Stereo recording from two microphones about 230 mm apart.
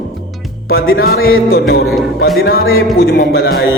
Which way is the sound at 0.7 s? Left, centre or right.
Left.